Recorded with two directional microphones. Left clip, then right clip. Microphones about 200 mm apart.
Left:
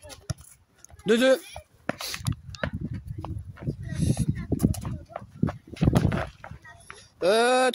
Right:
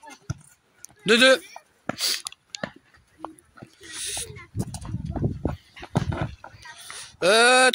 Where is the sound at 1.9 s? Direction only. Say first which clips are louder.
Right 7 dB; 5° left (ahead or behind).